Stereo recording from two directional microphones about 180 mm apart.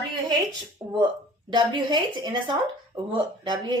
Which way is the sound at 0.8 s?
10° right (ahead or behind).